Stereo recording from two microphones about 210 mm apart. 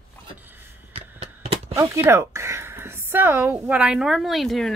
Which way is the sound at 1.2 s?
30° right (ahead or behind).